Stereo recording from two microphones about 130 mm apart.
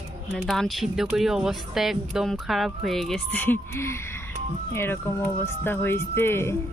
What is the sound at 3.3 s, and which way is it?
Speech, 15° left (ahead or behind).